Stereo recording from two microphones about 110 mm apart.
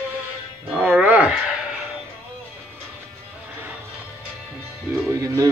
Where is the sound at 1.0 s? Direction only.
15° right (ahead or behind).